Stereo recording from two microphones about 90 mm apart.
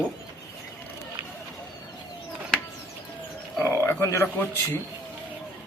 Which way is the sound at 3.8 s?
30° left (ahead or behind).